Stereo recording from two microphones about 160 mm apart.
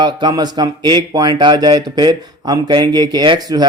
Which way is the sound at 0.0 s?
25° right (ahead or behind).